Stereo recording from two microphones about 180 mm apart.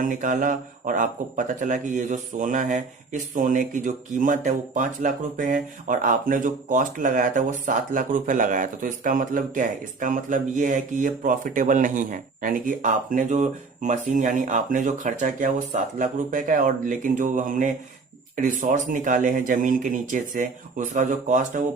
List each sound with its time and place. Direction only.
0.0 s speech: 45° right (ahead or behind)